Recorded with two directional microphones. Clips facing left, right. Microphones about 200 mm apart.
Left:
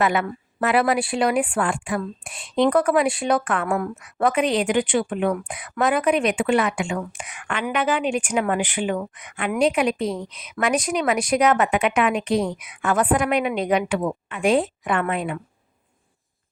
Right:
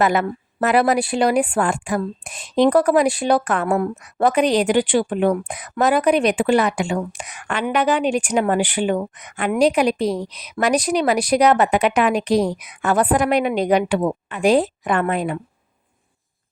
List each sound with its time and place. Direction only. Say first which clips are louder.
0.0 s speech: right 3 dB; 40° right (ahead or behind)